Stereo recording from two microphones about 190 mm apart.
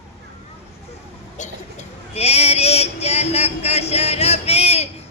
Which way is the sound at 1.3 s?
40° left (ahead or behind).